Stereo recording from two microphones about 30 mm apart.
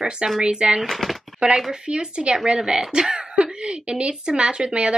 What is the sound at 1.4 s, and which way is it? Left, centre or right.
A woman's voice, right.